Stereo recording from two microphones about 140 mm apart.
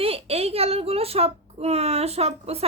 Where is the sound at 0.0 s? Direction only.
45° right (ahead or behind).